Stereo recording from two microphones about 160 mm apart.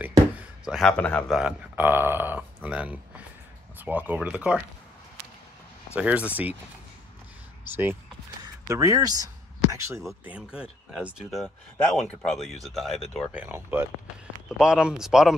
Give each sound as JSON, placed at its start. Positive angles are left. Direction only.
{"t": 0.4, "sound": "a man's voice", "side_deg": 0}
{"t": 1.4, "sound": "speech", "side_deg": -10}
{"t": 5.9, "sound": "speech", "side_deg": -10}
{"t": 7.6, "sound": "speech", "side_deg": -10}
{"t": 10.3, "sound": "speech", "side_deg": -5}
{"t": 13.3, "sound": "speech", "side_deg": -10}